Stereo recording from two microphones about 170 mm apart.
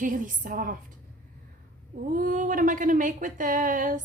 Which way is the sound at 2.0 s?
50° right (ahead or behind).